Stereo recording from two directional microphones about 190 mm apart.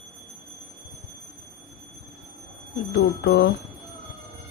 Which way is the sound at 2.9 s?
60° left (ahead or behind).